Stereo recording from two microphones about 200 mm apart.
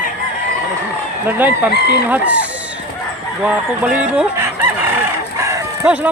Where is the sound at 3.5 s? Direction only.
5° right (ahead or behind).